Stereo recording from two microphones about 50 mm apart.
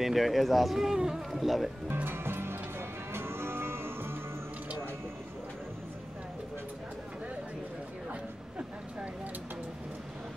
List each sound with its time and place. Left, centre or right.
0.0 s speech: centre
2.0 s music: right